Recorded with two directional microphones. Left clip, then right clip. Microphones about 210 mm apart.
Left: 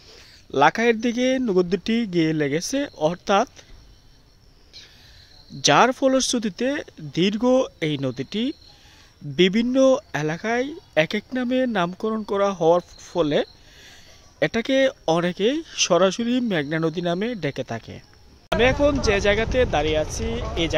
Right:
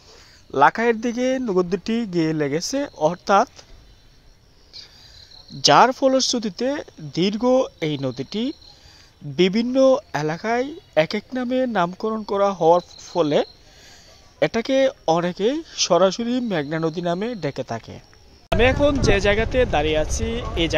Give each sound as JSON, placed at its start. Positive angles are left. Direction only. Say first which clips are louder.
{"t": 0.1, "sound": "speech", "louder": "even", "side_deg": 15}
{"t": 4.7, "sound": "cricket", "louder": "right 4 dB", "side_deg": 10}
{"t": 5.6, "sound": "speech", "louder": "right 3 dB", "side_deg": 10}
{"t": 18.5, "sound": "speech", "louder": "right 1 dB", "side_deg": -10}